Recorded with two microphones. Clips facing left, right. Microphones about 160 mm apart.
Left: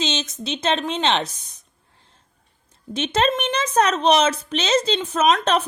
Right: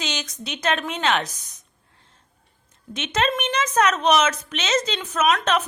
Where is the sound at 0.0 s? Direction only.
25° left (ahead or behind).